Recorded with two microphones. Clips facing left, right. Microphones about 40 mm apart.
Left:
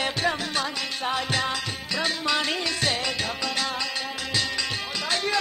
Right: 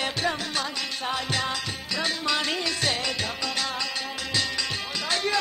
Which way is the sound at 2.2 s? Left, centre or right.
Centre.